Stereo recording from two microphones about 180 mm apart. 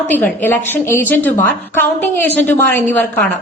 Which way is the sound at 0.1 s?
10° left (ahead or behind).